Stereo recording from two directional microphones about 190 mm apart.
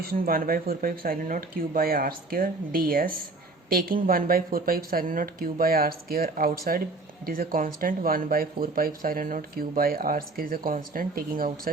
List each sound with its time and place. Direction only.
0.0 s speech: 50° right (ahead or behind)